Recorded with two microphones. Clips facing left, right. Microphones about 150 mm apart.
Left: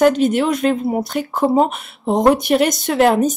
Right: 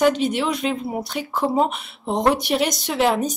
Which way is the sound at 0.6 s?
50° left (ahead or behind).